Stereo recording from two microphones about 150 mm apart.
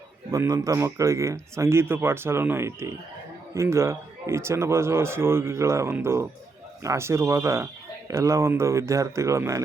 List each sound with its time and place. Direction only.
0.3 s speech: 20° right (ahead or behind)